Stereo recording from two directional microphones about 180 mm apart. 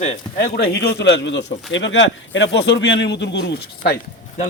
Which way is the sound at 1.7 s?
90° left.